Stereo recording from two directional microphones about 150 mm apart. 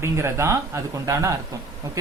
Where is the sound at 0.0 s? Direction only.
15° right (ahead or behind).